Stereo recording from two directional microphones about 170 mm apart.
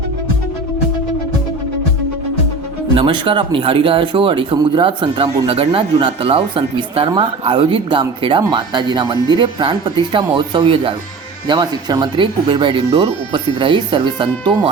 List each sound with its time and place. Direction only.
2.9 s speech: 30° right (ahead or behind)